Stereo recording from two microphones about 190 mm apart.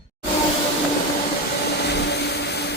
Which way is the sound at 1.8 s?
60° left (ahead or behind).